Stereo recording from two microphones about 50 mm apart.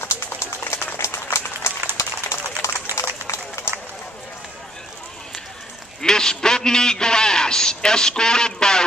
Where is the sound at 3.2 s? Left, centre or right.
Left.